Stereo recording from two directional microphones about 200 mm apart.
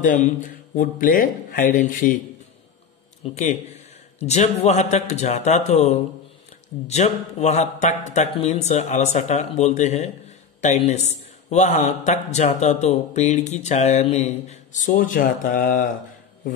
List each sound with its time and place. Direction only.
0.0 s a man's voice: 40° left (ahead or behind)
3.3 s a man's voice: 35° left (ahead or behind)